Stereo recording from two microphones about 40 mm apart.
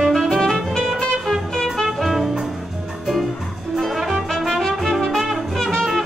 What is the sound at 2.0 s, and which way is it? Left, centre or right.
Music, centre.